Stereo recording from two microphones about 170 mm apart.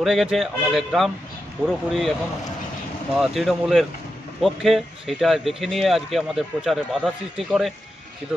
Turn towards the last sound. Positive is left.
turn(degrees=0)  # may be behind; listen again after turning